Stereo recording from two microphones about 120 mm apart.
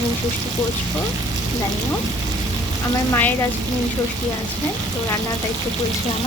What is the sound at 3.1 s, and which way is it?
Frying, 15° left (ahead or behind).